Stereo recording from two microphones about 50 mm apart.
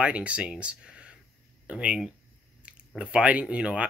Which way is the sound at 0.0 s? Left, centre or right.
Right.